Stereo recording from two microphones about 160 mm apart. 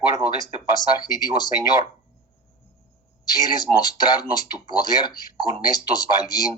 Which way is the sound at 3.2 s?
25° left (ahead or behind).